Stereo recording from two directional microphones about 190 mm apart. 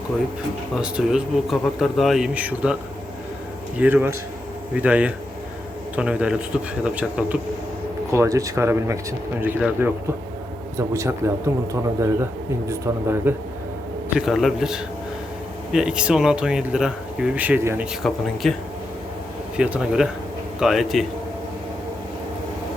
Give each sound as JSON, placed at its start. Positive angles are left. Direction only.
{"t": 0.8, "sound": "speech", "side_deg": -5}
{"t": 3.8, "sound": "a man's voice", "side_deg": -10}
{"t": 14.2, "sound": "speech", "side_deg": 0}
{"t": 18.0, "sound": "speech", "side_deg": 0}